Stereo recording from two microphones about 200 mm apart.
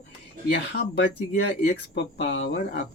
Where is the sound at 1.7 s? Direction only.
55° left (ahead or behind).